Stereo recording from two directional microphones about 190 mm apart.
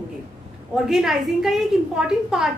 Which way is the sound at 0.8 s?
Centre (ahead or behind).